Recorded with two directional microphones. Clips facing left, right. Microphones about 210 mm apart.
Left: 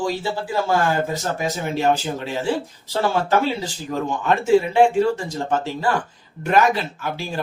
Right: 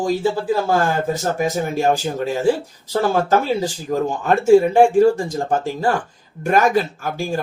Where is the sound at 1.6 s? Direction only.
45° right (ahead or behind).